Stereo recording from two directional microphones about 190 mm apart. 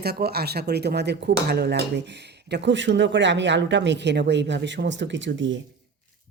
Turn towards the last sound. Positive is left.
turn(degrees=-75)  # may be behind; listen again after turning